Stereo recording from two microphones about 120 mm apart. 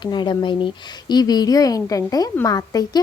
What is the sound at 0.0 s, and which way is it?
A woman's voice, 40° left (ahead or behind).